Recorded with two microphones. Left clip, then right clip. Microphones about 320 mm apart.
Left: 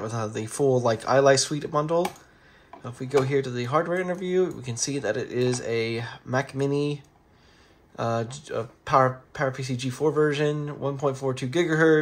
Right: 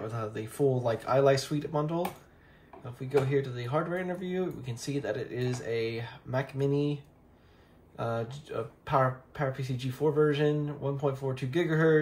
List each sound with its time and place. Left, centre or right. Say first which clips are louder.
0.0 s speech: left 6 dB; centre